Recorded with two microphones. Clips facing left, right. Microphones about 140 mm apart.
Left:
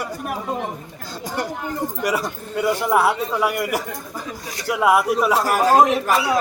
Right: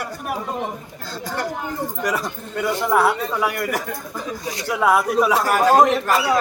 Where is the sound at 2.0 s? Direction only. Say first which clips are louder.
Left 2 dB; 10° left (ahead or behind).